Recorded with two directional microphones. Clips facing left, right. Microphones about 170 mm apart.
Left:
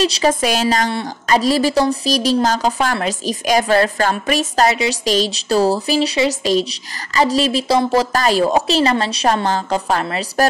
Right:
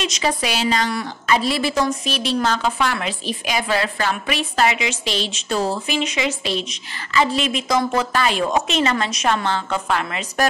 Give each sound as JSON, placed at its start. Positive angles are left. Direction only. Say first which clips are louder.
{"t": 0.0, "sound": "speech", "louder": "left 6 dB", "side_deg": 40}
{"t": 0.8, "sound": "a woman's voice", "louder": "left 2 dB", "side_deg": 35}